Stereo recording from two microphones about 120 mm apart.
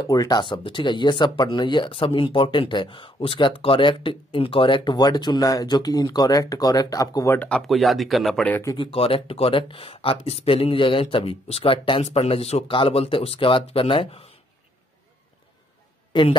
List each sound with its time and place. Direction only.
0.0 s speech: 30° left (ahead or behind)
7.3 s speech: 10° left (ahead or behind)
8.7 s speech: 50° left (ahead or behind)
16.1 s speech: 45° left (ahead or behind)